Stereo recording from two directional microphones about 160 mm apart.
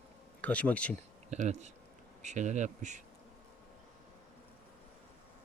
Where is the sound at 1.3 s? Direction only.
45° right (ahead or behind).